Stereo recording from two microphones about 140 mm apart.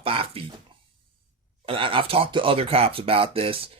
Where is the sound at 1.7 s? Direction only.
40° right (ahead or behind).